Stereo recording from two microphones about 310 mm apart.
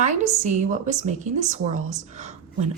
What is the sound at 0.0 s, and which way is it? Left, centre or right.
A woman's voice, right.